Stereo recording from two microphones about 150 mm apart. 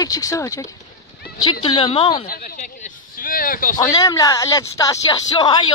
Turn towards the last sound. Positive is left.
turn(degrees=30)  # may be behind; listen again after turning